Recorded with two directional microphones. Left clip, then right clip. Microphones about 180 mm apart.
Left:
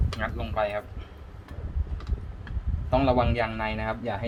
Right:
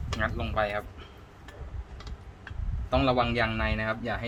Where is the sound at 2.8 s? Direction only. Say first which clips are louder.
Left 2 dB; centre (ahead or behind).